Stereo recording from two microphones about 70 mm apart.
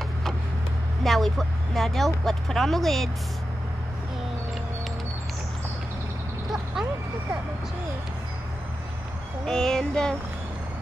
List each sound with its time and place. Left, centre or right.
1.0 s speech: centre
6.5 s a sound: centre
9.5 s child singing: centre